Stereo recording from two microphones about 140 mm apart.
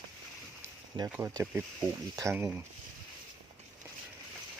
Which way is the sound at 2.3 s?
15° right (ahead or behind).